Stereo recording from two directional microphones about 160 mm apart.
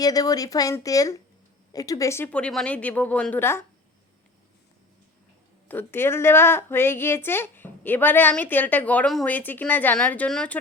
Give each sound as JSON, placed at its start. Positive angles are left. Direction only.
{"t": 0.0, "sound": "a woman's voice", "side_deg": 25}
{"t": 5.6, "sound": "a woman's voice", "side_deg": 15}